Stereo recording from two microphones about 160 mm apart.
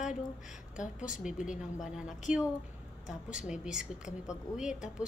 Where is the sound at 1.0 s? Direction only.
5° right (ahead or behind).